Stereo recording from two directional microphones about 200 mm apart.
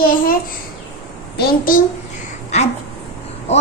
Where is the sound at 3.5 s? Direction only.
35° left (ahead or behind).